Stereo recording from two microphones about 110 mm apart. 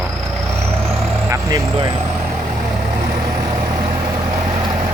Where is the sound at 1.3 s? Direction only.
30° right (ahead or behind).